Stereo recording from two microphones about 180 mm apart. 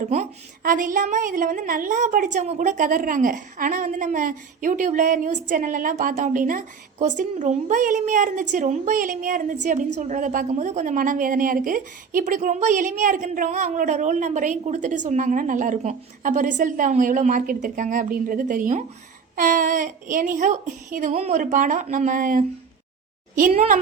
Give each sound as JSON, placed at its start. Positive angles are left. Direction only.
{"t": 0.0, "sound": "a woman's voice", "side_deg": -40}